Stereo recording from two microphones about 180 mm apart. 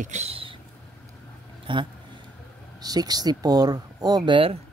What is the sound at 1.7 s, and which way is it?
Speech, 30° right (ahead or behind).